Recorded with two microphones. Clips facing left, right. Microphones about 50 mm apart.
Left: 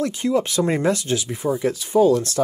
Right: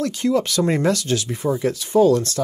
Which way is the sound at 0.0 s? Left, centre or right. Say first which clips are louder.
Right 1 dB; left.